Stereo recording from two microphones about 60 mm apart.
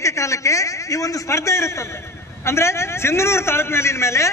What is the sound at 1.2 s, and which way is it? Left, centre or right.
A man's voice, left.